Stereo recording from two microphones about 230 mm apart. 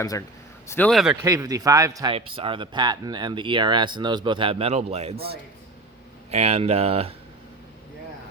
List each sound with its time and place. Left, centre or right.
0.0 s a man's voice: centre
1.2 s speech: centre
6.3 s speech: right